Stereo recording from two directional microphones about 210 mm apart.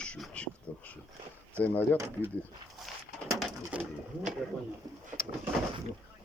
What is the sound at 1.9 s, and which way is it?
Speech, 15° right (ahead or behind).